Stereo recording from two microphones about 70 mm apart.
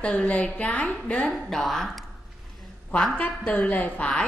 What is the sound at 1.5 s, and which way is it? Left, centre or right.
Speech, centre.